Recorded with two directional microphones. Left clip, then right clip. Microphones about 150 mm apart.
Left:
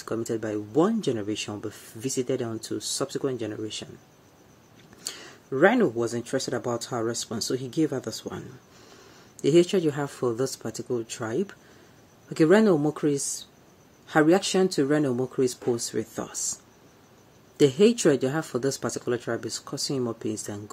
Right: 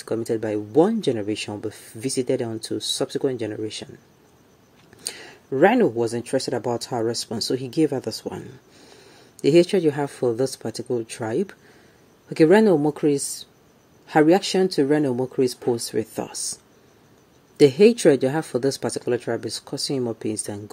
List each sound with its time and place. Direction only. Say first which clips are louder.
0.0 s speech: right 5 dB; 15° right (ahead or behind)
5.0 s a sound: right 3 dB; 15° right (ahead or behind)
6.5 s speech: right 4 dB; 20° right (ahead or behind)
17.6 s speech: right 5 dB; 15° right (ahead or behind)